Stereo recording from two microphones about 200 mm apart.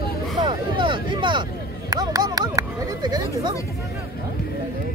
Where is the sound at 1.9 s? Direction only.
20° right (ahead or behind).